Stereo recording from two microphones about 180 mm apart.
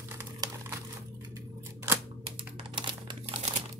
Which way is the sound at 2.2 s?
30° right (ahead or behind).